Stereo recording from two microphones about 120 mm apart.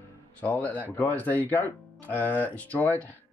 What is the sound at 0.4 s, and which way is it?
Speech, 15° left (ahead or behind).